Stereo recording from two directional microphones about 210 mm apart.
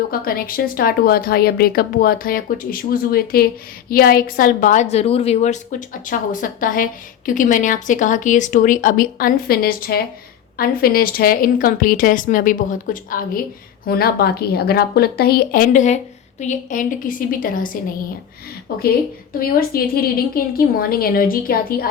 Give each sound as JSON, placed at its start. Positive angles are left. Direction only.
{"t": 0.1, "sound": "a woman's voice", "side_deg": 45}
{"t": 18.7, "sound": "speech", "side_deg": 45}